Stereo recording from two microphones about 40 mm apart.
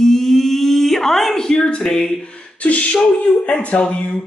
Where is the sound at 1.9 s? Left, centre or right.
Centre.